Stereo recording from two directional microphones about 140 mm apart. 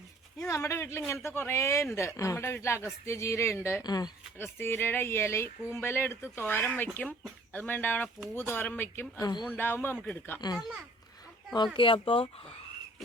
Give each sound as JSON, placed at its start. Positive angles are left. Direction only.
{"t": 0.3, "sound": "speech", "side_deg": 20}
{"t": 4.4, "sound": "speech", "side_deg": 15}
{"t": 11.5, "sound": "speech", "side_deg": 35}